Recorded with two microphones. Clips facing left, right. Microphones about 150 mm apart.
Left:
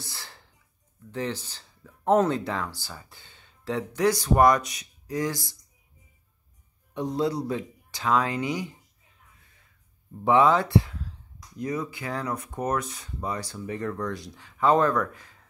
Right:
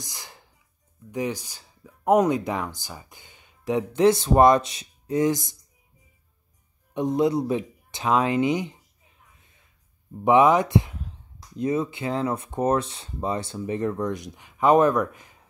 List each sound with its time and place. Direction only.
0.0 s speech: 15° right (ahead or behind)
6.9 s speech: 20° right (ahead or behind)
10.2 s speech: 15° right (ahead or behind)